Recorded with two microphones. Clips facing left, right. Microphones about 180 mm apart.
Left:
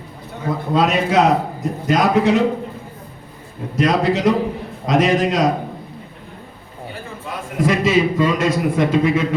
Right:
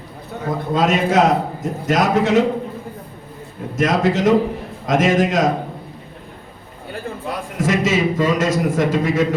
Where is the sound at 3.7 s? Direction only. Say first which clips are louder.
Even; 45° right (ahead or behind).